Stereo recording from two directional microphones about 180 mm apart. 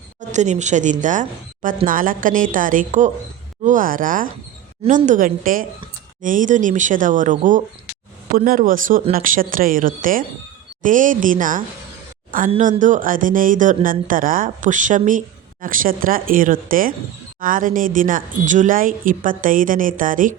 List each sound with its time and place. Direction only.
0.2 s speech: 40° right (ahead or behind)
12.5 s speech: 40° right (ahead or behind)